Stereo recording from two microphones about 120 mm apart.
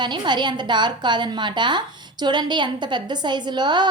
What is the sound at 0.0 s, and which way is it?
A woman's voice, 40° right (ahead or behind).